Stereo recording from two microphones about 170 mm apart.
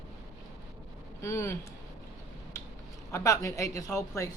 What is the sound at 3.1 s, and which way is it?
A woman's voice, 20° left (ahead or behind).